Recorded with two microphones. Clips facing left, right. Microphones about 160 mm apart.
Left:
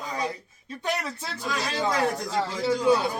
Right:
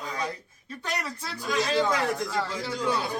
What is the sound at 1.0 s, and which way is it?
Speech, 20° left (ahead or behind).